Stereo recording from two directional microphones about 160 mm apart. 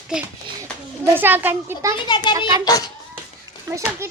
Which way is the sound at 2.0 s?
25° left (ahead or behind).